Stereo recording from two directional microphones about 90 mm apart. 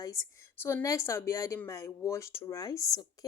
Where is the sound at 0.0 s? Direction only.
40° left (ahead or behind).